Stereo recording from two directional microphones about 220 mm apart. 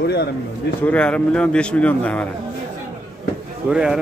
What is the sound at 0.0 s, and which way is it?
Speech, 50° left (ahead or behind).